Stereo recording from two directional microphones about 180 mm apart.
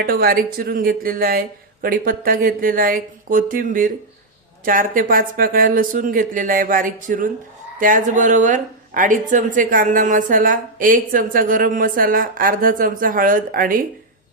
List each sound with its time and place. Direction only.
0.0 s speech: 55° right (ahead or behind)